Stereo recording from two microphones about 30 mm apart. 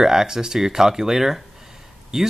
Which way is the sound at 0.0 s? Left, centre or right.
Centre.